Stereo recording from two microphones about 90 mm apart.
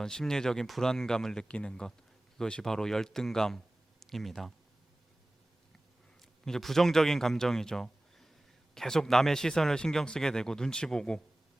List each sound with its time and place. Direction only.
0.0 s speech: 5° left (ahead or behind)
6.4 s speech: 5° left (ahead or behind)